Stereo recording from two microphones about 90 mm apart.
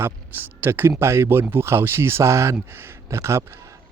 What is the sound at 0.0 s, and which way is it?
Speech, 25° right (ahead or behind).